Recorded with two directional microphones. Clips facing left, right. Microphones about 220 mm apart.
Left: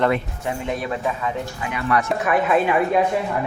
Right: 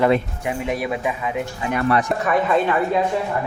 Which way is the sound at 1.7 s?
45° right (ahead or behind).